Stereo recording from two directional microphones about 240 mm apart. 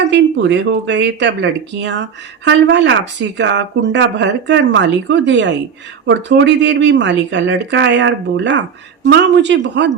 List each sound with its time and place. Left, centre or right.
0.0 s speech: right